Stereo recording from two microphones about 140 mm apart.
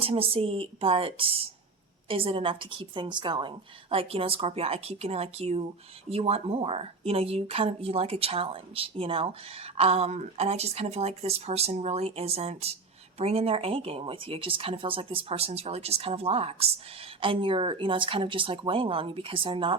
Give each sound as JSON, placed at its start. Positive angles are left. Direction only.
{"t": 0.0, "sound": "a woman's voice", "side_deg": -40}